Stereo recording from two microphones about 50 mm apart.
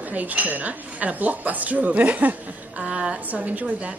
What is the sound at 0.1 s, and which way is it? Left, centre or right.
Speech, right.